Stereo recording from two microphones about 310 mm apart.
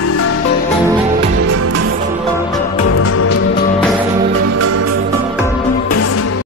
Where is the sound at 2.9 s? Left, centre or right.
Left.